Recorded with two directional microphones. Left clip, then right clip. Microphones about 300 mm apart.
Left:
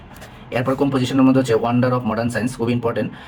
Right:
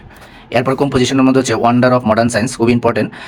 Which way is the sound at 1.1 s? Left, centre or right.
Right.